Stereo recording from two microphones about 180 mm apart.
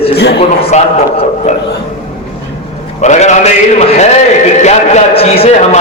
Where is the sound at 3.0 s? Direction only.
40° left (ahead or behind).